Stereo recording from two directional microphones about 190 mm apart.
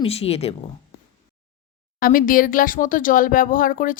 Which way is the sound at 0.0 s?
30° left (ahead or behind).